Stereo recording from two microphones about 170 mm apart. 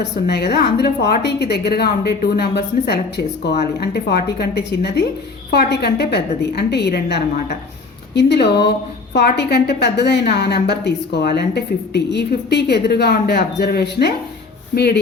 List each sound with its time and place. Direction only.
0.3 s a woman's voice: 75° left (ahead or behind)